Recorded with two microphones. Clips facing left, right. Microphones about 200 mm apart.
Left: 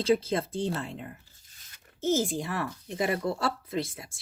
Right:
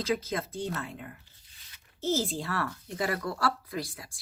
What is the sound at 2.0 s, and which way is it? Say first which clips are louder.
Speech: left 3 dB; 15° left (ahead or behind).